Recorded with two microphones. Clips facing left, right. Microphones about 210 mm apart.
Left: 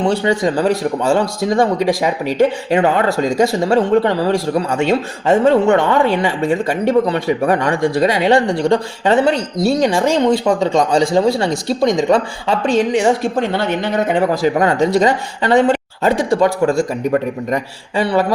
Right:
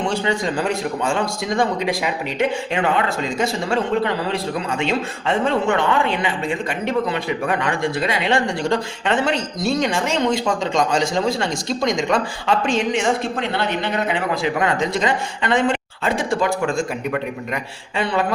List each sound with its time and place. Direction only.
0.2 s speech: 40° left (ahead or behind)